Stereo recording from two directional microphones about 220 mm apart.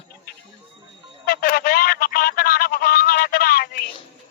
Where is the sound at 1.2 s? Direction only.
45° left (ahead or behind).